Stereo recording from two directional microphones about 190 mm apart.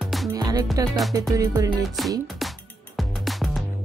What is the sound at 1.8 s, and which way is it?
Music, centre (ahead or behind).